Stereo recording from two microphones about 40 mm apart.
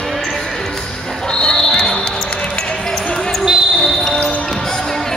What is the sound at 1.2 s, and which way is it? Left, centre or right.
Basketball bounce, centre.